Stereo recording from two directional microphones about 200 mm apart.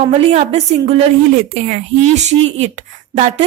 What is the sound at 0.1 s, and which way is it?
A woman's voice, 30° right (ahead or behind).